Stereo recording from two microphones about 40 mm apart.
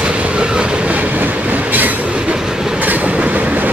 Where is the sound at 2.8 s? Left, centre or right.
Right.